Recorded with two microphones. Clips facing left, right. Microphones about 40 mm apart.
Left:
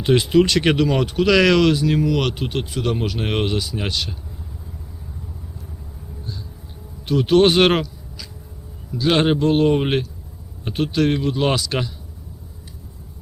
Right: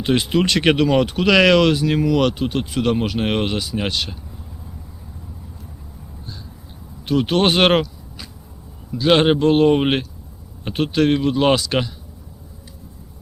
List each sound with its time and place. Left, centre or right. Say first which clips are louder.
0.2 s speech: left 2 dB; right
2.4 s speech: right 3 dB; left
2.6 s speech: right 4 dB; right
3.2 s speech: right 1 dB; right
7.1 s speech: left 2 dB; right
9.0 s speech: right 3 dB; right